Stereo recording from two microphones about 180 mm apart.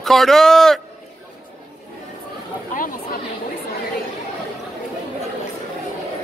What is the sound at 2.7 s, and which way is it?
Chatter, 45° left (ahead or behind).